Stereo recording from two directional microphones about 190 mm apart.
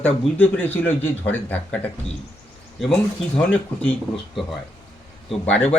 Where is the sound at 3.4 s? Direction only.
5° left (ahead or behind).